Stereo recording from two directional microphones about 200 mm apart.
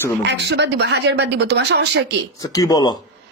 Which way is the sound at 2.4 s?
15° left (ahead or behind).